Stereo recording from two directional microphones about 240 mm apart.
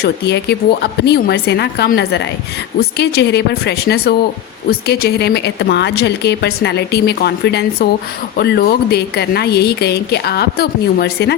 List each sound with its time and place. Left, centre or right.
0.0 s a woman's voice: left